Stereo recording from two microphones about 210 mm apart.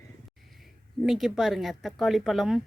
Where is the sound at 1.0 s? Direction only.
Centre (ahead or behind).